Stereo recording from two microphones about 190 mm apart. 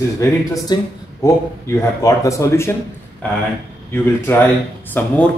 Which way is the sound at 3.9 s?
10° left (ahead or behind).